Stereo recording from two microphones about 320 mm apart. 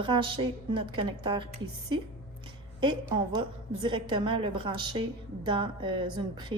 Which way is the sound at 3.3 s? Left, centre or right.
Centre.